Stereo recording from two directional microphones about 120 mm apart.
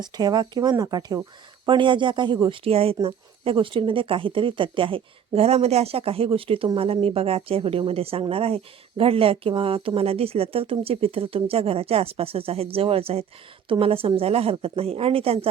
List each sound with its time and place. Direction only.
0.0 s speech: 35° right (ahead or behind); by 15.4 s 55° right (ahead or behind)